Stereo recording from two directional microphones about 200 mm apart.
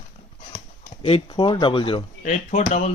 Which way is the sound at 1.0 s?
25° left (ahead or behind).